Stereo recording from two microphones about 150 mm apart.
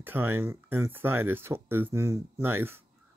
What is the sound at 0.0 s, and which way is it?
Speech, 15° right (ahead or behind).